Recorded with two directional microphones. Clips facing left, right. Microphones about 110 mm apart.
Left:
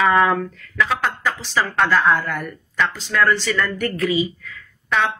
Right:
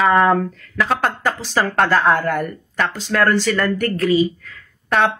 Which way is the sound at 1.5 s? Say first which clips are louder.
Right 2 dB; 50° right (ahead or behind).